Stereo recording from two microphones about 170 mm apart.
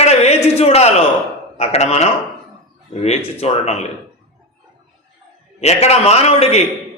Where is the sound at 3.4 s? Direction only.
40° left (ahead or behind).